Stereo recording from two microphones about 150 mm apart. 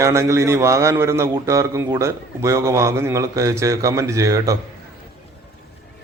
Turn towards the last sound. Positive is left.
turn(degrees=-20)  # may be behind; listen again after turning